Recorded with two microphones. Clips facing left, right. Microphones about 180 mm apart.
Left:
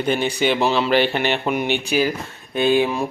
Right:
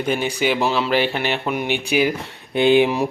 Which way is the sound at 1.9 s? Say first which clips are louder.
Right 1 dB; 15° right (ahead or behind).